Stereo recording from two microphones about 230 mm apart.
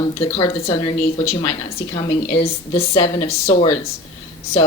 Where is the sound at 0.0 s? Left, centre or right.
Centre.